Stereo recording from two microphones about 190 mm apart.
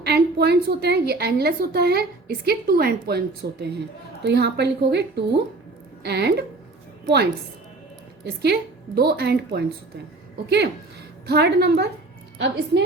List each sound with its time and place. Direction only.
0.0 s a woman's voice: 60° right (ahead or behind)
11.3 s a woman's voice: 60° right (ahead or behind)